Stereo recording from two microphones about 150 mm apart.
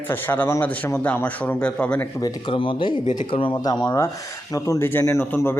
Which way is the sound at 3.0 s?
55° left (ahead or behind).